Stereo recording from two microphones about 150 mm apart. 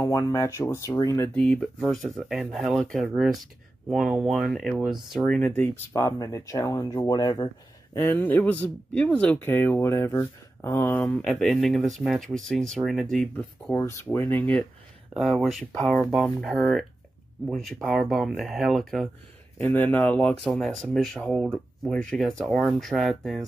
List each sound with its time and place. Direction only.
0.0 s speech: 20° left (ahead or behind)
1.3 s speech: 10° left (ahead or behind)
5.6 s speech: 20° left (ahead or behind); by 13.3 s centre (ahead or behind)
13.7 s speech: 15° left (ahead or behind)
15.1 s speech: centre (ahead or behind)
19.6 s speech: 15° left (ahead or behind)